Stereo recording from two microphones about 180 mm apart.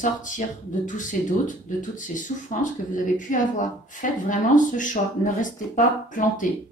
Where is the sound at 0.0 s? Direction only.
45° left (ahead or behind).